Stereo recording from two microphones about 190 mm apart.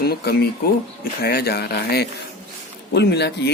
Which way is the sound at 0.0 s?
55° left (ahead or behind).